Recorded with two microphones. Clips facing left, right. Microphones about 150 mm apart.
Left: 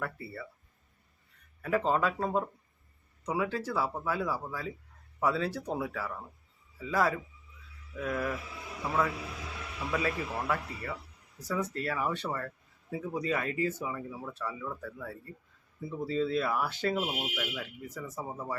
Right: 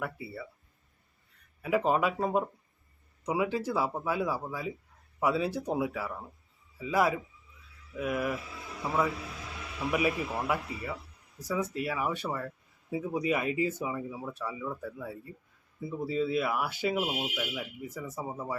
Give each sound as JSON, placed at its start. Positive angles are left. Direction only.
{"t": 0.0, "sound": "speech", "side_deg": -10}
{"t": 1.6, "sound": "a man's voice", "side_deg": -15}